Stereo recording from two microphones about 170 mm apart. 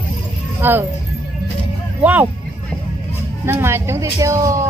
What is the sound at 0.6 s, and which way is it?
Speech, 15° right (ahead or behind).